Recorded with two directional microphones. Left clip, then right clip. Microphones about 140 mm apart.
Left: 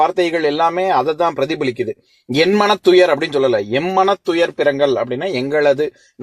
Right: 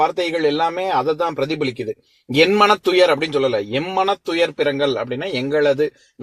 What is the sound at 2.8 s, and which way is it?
A man's voice, 45° left (ahead or behind).